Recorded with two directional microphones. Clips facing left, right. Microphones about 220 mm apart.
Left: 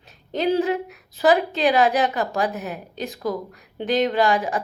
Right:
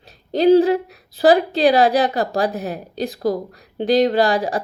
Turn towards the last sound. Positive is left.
turn(degrees=-35)  # may be behind; listen again after turning